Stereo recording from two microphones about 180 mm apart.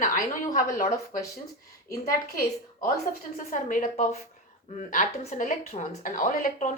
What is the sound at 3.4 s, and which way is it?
A woman's voice, 45° left (ahead or behind).